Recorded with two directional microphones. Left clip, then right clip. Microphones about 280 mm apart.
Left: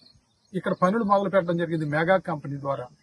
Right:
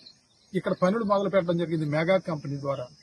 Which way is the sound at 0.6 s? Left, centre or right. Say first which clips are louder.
Left 2 dB; centre.